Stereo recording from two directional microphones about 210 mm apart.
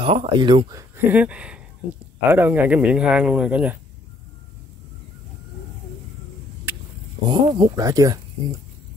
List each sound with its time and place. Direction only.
0.0 s speech: 25° right (ahead or behind); by 3.7 s 5° right (ahead or behind)
7.2 s speech: 20° right (ahead or behind)